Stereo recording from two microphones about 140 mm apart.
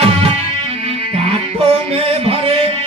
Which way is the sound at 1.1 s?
45° right (ahead or behind).